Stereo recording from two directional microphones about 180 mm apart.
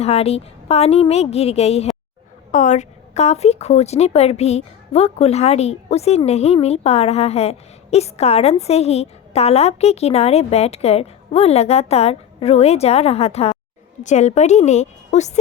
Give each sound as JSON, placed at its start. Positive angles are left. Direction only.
{"t": 0.0, "sound": "a woman's voice", "side_deg": 35}